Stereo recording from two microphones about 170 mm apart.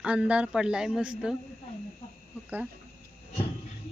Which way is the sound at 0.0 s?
5° right (ahead or behind).